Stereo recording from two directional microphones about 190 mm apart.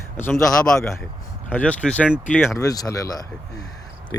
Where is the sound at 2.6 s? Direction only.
20° left (ahead or behind).